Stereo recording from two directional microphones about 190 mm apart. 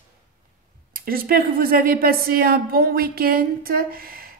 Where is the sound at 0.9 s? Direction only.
50° right (ahead or behind).